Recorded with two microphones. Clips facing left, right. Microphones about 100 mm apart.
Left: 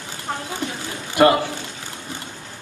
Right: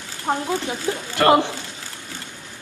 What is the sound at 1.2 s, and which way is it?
Speech, 20° left (ahead or behind).